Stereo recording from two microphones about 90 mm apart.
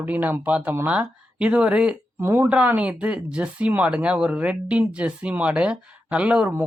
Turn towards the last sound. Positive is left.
turn(degrees=-15)  # may be behind; listen again after turning